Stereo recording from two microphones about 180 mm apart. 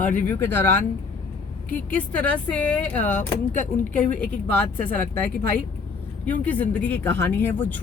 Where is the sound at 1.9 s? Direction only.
10° left (ahead or behind).